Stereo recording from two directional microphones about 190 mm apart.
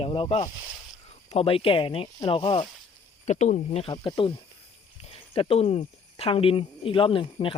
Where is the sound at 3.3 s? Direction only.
40° left (ahead or behind).